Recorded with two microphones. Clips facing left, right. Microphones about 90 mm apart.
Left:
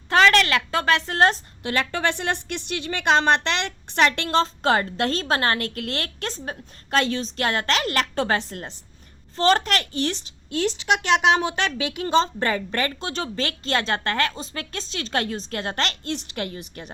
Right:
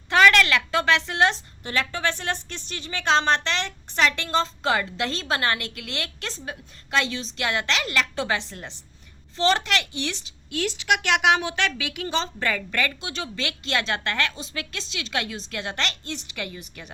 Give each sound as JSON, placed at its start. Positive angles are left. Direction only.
{"t": 0.1, "sound": "a woman's voice", "side_deg": 35}
{"t": 1.6, "sound": "a woman's voice", "side_deg": 60}